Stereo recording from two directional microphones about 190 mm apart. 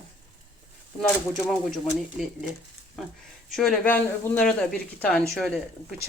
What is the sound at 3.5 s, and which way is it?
Speech, centre (ahead or behind).